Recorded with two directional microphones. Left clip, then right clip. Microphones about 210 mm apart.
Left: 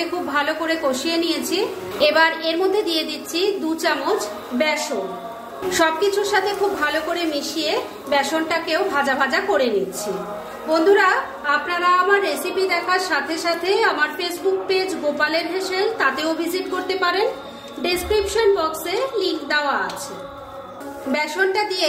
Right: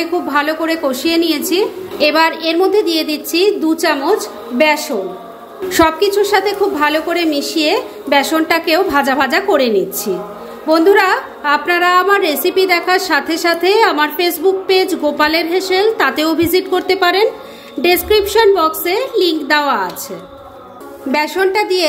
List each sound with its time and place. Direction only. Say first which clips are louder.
0.3 s a woman's voice: right 5 dB; 30° right (ahead or behind)
10.7 s a woman's voice: right 5 dB; 40° right (ahead or behind)
21.1 s a woman's voice: right 6 dB; 35° right (ahead or behind)